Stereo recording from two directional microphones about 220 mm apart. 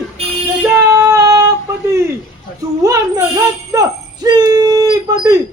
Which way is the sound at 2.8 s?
15° right (ahead or behind).